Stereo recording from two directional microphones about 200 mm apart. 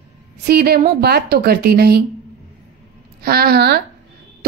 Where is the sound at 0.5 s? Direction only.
50° right (ahead or behind).